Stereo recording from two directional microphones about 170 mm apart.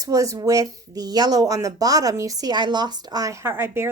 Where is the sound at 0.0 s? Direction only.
20° right (ahead or behind).